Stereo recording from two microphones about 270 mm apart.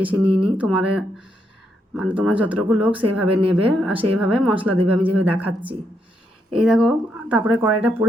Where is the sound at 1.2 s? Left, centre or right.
Left.